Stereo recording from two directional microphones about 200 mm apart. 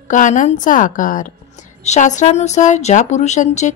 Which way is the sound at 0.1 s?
40° left (ahead or behind).